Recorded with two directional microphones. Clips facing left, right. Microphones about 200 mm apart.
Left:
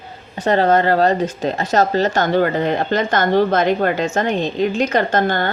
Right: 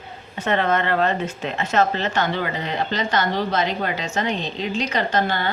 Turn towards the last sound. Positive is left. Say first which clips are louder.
# left 4 dB
turn(degrees=45)  # may be behind; listen again after turning